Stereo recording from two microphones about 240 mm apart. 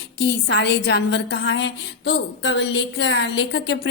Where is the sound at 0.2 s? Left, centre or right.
Left.